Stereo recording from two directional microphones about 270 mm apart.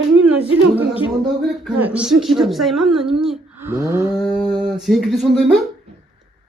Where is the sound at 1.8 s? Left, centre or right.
Centre.